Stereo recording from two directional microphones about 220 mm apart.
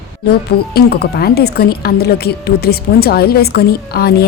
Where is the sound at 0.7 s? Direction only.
45° left (ahead or behind).